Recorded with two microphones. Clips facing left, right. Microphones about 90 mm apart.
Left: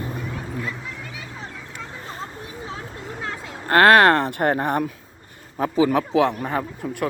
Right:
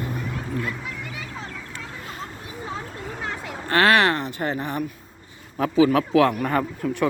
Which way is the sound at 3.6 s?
40° left (ahead or behind).